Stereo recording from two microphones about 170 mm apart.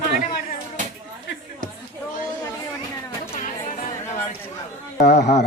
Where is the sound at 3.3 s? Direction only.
40° left (ahead or behind).